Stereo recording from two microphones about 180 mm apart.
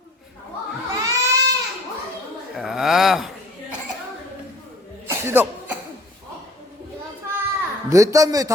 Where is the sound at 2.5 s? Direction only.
Centre (ahead or behind).